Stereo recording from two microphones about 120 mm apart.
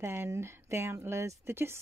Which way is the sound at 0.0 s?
20° right (ahead or behind).